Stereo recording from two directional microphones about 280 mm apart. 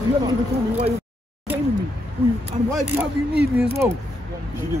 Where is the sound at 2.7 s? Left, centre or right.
Centre.